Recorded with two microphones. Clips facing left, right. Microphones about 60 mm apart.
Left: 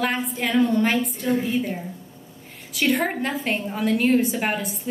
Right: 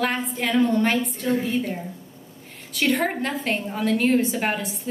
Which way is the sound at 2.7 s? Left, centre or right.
Centre.